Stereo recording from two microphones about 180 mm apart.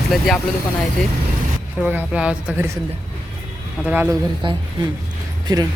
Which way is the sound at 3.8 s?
10° right (ahead or behind).